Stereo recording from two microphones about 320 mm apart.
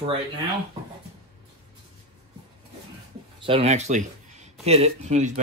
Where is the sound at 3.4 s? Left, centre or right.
Centre.